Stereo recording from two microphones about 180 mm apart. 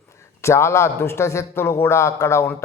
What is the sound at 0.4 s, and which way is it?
Speech, 15° left (ahead or behind).